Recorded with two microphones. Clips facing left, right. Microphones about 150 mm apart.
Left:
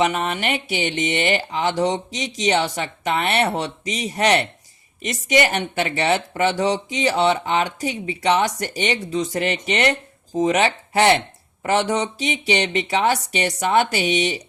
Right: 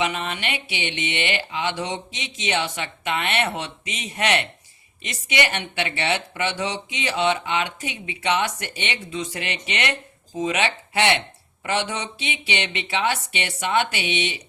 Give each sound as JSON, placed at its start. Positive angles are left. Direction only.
{"t": 0.0, "sound": "speech", "side_deg": 45}